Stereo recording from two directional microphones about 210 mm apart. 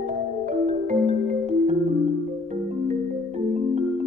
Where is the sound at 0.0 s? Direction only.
35° right (ahead or behind).